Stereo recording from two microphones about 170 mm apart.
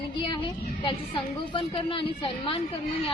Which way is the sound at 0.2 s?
30° left (ahead or behind).